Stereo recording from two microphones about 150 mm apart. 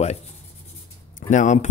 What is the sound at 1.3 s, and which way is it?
Speech, 55° left (ahead or behind).